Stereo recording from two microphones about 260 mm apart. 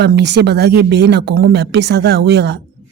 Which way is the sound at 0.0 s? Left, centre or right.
Right.